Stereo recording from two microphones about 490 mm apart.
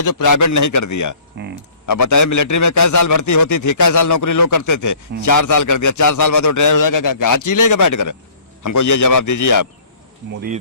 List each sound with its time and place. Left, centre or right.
0.0 s a man's voice: left
1.4 s speech: right
1.9 s a man's voice: left